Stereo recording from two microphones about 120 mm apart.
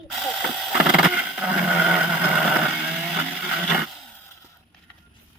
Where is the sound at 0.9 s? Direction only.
5° right (ahead or behind).